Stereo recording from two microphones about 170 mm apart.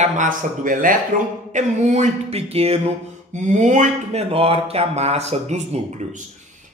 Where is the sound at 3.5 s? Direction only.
45° right (ahead or behind).